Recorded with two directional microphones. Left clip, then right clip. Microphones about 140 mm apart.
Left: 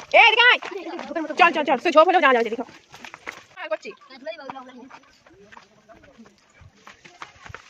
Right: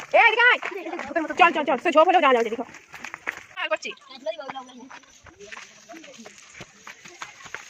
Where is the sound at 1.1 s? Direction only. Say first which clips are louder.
Right 2 dB; 65° left (ahead or behind).